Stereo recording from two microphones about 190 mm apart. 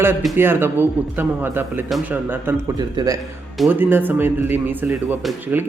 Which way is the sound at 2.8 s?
20° right (ahead or behind).